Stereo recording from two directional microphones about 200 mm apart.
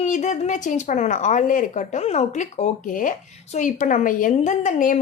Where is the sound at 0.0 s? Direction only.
35° left (ahead or behind).